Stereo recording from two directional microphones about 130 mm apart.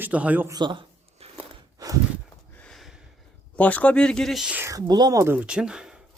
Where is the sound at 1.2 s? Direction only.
50° right (ahead or behind).